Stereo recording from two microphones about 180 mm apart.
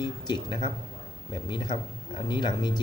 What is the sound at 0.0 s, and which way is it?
A man's voice, 25° left (ahead or behind).